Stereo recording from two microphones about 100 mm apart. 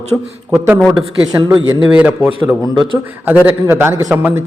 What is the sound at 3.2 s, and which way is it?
A man's voice, 20° right (ahead or behind).